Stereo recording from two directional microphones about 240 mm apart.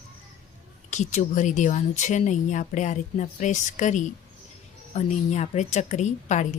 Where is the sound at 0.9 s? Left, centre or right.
Left.